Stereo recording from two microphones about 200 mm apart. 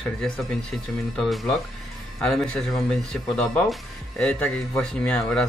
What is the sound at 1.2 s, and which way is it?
Speech, centre (ahead or behind).